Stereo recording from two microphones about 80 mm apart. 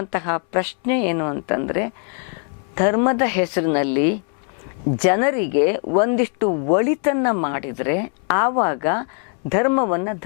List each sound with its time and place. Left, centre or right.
0.0 s a woman's voice: centre